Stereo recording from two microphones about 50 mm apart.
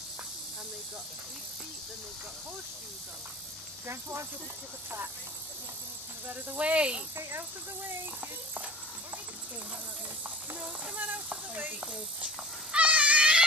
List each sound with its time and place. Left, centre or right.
3.8 s speech: right
6.6 s speech: right
7.2 s speech: right
10.6 s speech: right
12.7 s a sound: right